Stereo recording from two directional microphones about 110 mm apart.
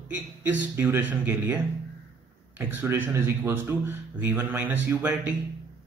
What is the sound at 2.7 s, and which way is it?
A man's voice, 20° right (ahead or behind).